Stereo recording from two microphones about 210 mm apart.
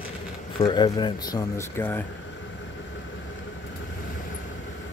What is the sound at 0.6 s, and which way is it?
Speech, 20° left (ahead or behind).